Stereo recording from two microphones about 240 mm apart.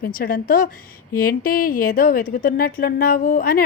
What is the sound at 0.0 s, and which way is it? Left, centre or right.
Speech, left.